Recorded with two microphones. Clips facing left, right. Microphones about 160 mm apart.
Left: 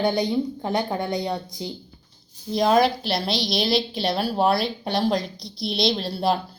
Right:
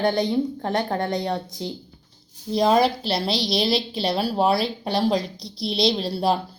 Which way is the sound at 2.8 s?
35° right (ahead or behind).